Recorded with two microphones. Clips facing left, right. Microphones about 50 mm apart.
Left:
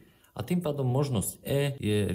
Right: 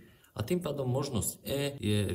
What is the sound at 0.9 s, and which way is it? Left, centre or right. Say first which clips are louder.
Speech: left 4 dB; left.